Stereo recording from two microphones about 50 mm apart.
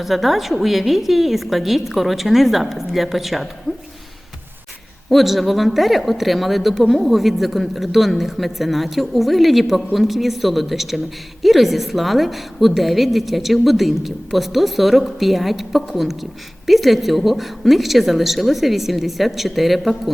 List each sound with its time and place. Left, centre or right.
0.0 s speech: centre
3.7 s speech: centre
5.0 s speech: centre